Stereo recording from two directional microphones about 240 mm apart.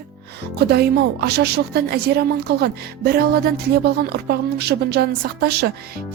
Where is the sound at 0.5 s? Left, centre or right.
Right.